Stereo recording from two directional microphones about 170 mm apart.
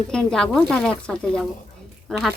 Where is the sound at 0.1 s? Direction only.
5° left (ahead or behind).